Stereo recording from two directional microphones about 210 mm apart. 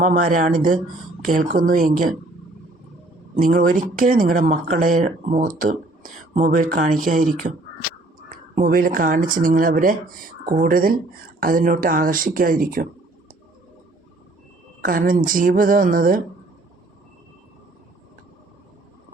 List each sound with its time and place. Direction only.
0.0 s speech: 40° right (ahead or behind)
3.3 s speech: 40° right (ahead or behind)
8.5 s speech: 40° right (ahead or behind)
14.8 s a woman's voice: 40° right (ahead or behind)